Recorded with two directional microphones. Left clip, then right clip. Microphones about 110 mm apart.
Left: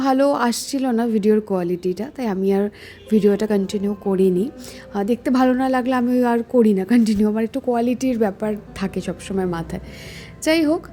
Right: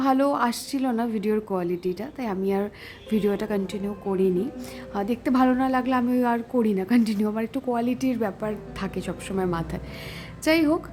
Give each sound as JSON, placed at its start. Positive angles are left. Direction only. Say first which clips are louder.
{"t": 0.0, "sound": "a woman's voice", "louder": "left 4 dB", "side_deg": 35}
{"t": 4.9, "sound": "a woman's voice", "louder": "left 4 dB", "side_deg": 30}